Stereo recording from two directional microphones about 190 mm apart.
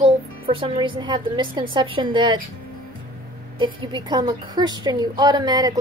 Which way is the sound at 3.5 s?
25° right (ahead or behind).